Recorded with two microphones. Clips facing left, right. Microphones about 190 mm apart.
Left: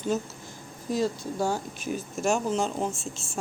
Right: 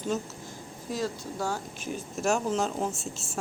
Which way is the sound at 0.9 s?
15° left (ahead or behind).